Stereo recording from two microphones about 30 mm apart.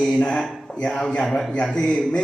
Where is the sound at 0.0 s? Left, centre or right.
Left.